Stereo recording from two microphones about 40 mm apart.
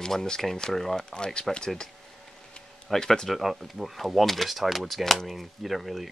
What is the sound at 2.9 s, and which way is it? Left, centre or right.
Speech, centre.